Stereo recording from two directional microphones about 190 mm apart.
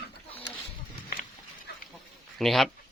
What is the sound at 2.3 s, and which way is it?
Speech, centre (ahead or behind).